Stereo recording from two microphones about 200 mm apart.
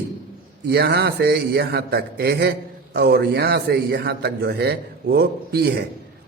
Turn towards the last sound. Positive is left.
turn(degrees=-50)  # may be behind; listen again after turning